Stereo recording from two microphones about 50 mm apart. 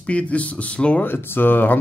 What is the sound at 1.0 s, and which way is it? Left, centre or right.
Speech, left.